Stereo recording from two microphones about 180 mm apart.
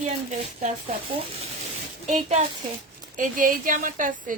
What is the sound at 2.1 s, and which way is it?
A woman's voice, 45° right (ahead or behind).